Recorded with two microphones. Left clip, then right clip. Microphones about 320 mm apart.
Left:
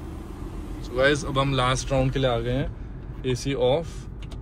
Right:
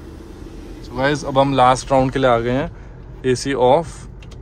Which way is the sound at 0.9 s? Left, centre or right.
Right.